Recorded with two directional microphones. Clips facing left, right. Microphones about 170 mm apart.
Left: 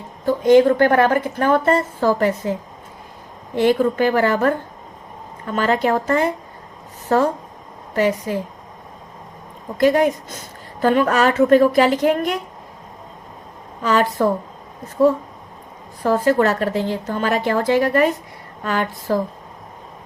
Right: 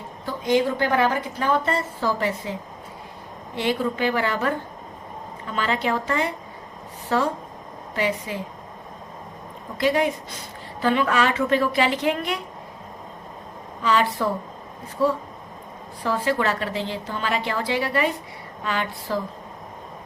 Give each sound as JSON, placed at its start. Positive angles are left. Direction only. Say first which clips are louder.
{"t": 0.3, "sound": "a woman's voice", "louder": "left 9 dB", "side_deg": 50}
{"t": 9.7, "sound": "a woman's voice", "louder": "left 6 dB", "side_deg": 45}
{"t": 13.8, "sound": "a woman's voice", "louder": "left 4 dB", "side_deg": 45}
{"t": 16.0, "sound": "a woman's voice", "louder": "left 7 dB", "side_deg": 45}